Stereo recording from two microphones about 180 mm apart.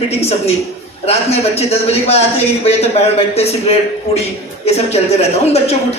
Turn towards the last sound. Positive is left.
turn(degrees=35)  # may be behind; listen again after turning